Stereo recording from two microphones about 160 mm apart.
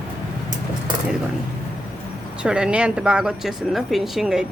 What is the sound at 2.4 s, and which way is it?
Speech, 5° right (ahead or behind).